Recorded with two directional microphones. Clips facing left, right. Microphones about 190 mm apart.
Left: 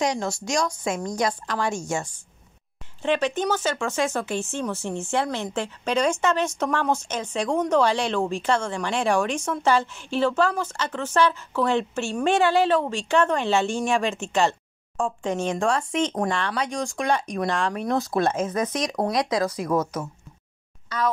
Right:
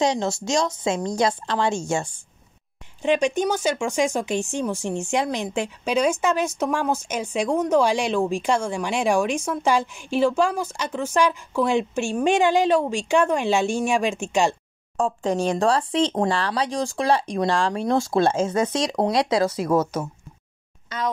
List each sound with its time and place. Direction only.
0.0 s speech: 25° right (ahead or behind)
3.0 s speech: 15° right (ahead or behind)
15.0 s speech: 40° right (ahead or behind); by 21.0 s 20° right (ahead or behind)